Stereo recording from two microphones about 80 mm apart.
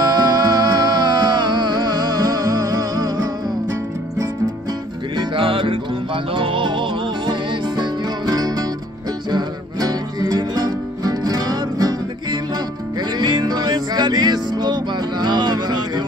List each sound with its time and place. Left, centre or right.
0.0 s music: right
5.1 s music: right